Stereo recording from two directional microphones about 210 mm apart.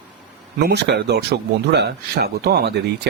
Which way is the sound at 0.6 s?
50° right (ahead or behind).